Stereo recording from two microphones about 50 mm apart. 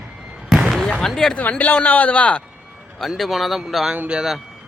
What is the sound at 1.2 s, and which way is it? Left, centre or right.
Speech, centre.